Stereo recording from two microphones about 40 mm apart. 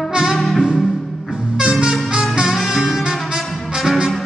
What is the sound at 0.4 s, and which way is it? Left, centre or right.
Music, centre.